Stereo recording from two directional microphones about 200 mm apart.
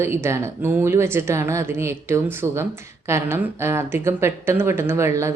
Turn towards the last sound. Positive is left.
turn(degrees=-15)  # may be behind; listen again after turning